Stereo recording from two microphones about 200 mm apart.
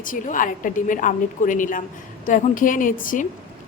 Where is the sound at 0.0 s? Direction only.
40° left (ahead or behind).